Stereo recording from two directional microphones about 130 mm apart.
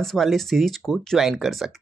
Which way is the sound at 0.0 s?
Centre (ahead or behind).